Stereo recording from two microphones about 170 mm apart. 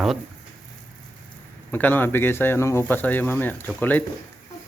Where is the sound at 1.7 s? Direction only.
10° left (ahead or behind).